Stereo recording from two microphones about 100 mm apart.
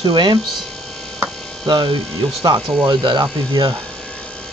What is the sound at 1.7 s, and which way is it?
Speech, 50° right (ahead or behind).